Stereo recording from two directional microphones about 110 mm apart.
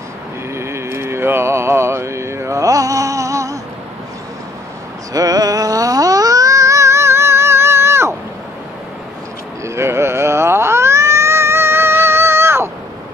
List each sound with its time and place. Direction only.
0.6 s mantra: 25° right (ahead or behind)
5.1 s a sound: 35° right (ahead or behind)
9.8 s cat: 25° right (ahead or behind)